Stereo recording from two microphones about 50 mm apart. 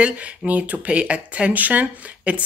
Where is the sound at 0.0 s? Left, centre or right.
Right.